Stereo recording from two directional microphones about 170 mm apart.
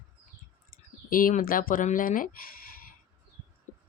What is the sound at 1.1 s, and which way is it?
Speech, 55° left (ahead or behind).